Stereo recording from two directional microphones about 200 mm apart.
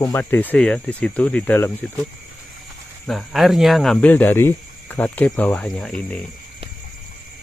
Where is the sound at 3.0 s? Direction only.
Centre (ahead or behind).